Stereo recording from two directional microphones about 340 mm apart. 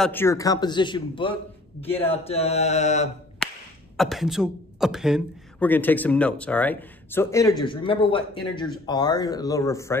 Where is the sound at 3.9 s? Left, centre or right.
Centre.